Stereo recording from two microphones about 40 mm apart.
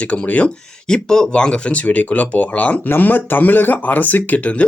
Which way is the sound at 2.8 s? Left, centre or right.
Left.